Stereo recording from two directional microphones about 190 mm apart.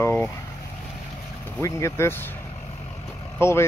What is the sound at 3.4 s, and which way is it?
Speech, 15° left (ahead or behind).